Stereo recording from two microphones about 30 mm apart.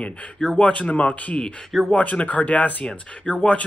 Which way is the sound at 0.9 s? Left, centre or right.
Left.